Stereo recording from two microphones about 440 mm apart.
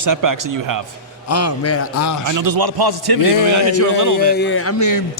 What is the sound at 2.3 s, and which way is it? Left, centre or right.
Speech, right.